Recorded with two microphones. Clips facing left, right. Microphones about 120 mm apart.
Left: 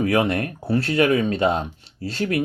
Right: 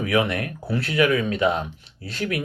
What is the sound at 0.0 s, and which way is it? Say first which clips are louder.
Speech: left 2 dB; 35° left (ahead or behind).